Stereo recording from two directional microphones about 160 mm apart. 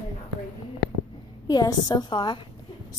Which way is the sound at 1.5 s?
25° left (ahead or behind).